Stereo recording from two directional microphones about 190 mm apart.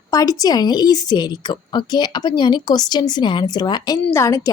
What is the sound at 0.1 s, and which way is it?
A woman's voice, 20° left (ahead or behind).